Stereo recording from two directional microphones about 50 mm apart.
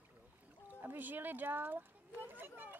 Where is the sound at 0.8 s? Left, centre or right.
Right.